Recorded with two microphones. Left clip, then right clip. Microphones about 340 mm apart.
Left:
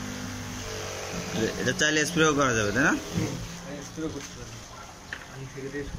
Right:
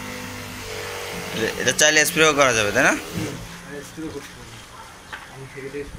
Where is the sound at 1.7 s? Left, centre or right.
Centre.